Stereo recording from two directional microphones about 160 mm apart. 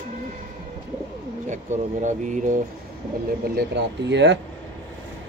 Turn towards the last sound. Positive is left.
turn(degrees=-90)